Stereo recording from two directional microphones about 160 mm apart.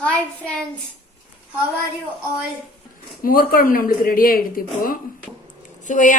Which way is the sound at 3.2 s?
65° left (ahead or behind).